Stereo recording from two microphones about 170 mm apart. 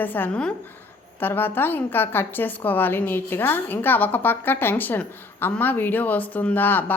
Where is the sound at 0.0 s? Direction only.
10° left (ahead or behind).